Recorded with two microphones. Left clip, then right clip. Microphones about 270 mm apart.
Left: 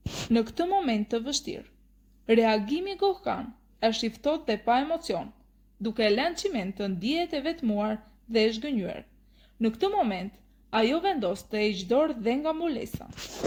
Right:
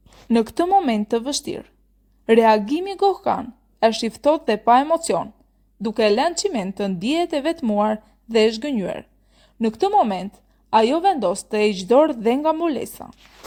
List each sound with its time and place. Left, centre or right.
0.3 s a woman's voice: right